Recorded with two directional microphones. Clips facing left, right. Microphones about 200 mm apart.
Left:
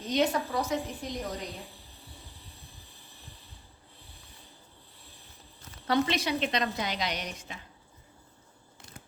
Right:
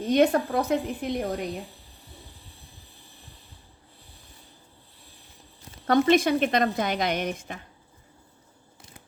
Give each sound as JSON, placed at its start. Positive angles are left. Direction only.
{"t": 0.0, "sound": "a woman's voice", "side_deg": -55}
{"t": 5.9, "sound": "a woman's voice", "side_deg": -50}